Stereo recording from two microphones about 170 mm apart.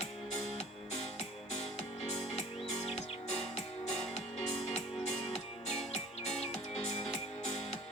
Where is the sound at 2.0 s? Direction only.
40° left (ahead or behind).